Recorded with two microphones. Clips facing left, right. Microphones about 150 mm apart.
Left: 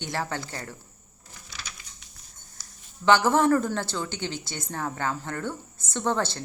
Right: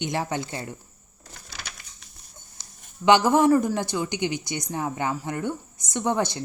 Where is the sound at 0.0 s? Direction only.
20° right (ahead or behind).